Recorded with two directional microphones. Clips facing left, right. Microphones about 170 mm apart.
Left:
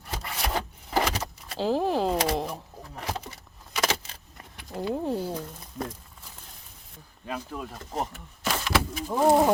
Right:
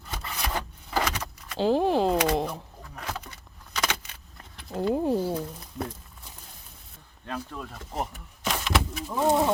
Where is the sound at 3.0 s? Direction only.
30° left (ahead or behind).